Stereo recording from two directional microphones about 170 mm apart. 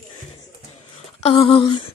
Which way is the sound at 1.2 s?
30° left (ahead or behind).